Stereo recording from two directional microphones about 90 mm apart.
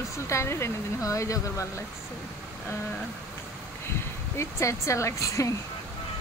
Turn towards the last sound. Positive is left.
turn(degrees=35)  # may be behind; listen again after turning